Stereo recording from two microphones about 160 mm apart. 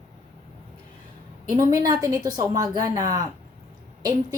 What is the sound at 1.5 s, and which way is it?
A woman's voice, 20° right (ahead or behind).